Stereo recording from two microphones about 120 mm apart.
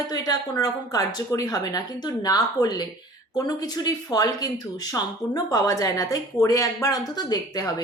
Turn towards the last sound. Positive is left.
turn(degrees=35)  # may be behind; listen again after turning